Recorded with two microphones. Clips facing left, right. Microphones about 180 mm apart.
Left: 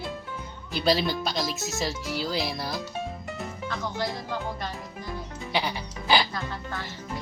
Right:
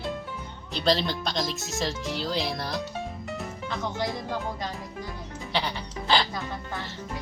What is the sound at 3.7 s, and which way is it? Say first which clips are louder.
Speech: right 1 dB; 20° right (ahead or behind).